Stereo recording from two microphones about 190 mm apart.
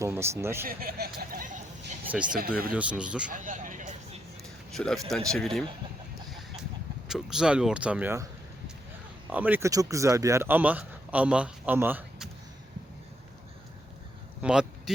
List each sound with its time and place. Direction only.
0.0 s speech: 15° right (ahead or behind)
0.6 s vehicle: 50° right (ahead or behind)
2.0 s speech: 5° right (ahead or behind)
3.2 s vehicle: 45° right (ahead or behind)
4.7 s speech: 5° left (ahead or behind)
7.1 s speech: 5° right (ahead or behind)
9.3 s speech: 10° right (ahead or behind)
14.4 s a sound: 5° right (ahead or behind)